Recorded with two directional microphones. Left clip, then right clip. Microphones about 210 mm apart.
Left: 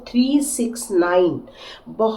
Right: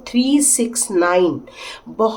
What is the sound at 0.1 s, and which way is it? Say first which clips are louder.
Speech: right 3 dB; 35° right (ahead or behind).